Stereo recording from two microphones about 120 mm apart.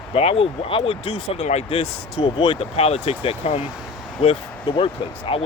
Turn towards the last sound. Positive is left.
turn(degrees=50)  # may be behind; listen again after turning